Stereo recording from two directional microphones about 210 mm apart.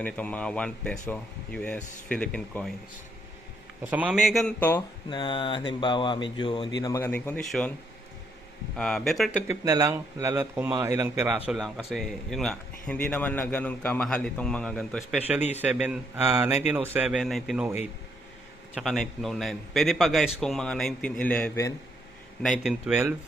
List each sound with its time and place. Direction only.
0.0 s speech: 5° left (ahead or behind)
3.8 s speech: 5° right (ahead or behind)
5.0 s speech: 20° left (ahead or behind); by 7.7 s 5° left (ahead or behind)
8.7 s speech: 5° left (ahead or behind)
9.5 s a man's voice: 15° right (ahead or behind); by 21.7 s 10° left (ahead or behind)
22.4 s speech: centre (ahead or behind)